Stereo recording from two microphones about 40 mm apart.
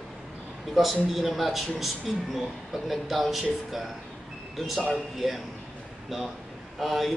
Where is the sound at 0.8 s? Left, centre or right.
Centre.